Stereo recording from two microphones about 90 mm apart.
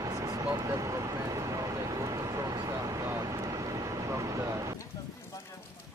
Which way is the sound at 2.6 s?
40° right (ahead or behind).